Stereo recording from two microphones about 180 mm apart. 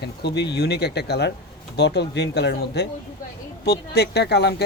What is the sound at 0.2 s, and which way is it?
Speech, 70° left (ahead or behind).